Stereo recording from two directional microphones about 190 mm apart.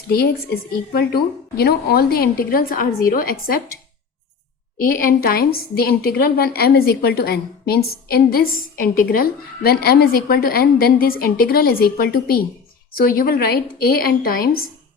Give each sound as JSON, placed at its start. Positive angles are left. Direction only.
{"t": 0.1, "sound": "a woman's voice", "side_deg": 55}
{"t": 4.8, "sound": "a woman's voice", "side_deg": 50}